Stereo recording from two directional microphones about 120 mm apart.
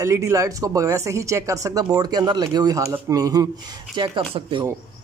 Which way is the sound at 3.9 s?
45° right (ahead or behind).